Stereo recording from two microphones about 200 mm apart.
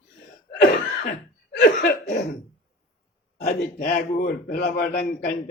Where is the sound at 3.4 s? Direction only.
50° left (ahead or behind).